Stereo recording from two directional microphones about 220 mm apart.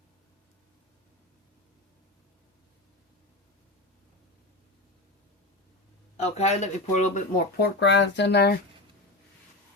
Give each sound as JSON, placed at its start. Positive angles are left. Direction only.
{"t": 6.2, "sound": "speech", "side_deg": 30}